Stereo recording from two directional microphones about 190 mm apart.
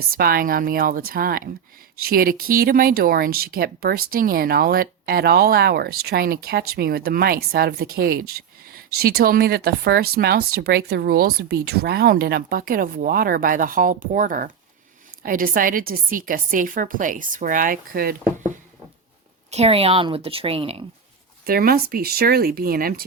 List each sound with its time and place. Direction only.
0.1 s speech: 50° right (ahead or behind)
19.5 s a woman's voice: 35° right (ahead or behind)
21.4 s speech: 50° right (ahead or behind)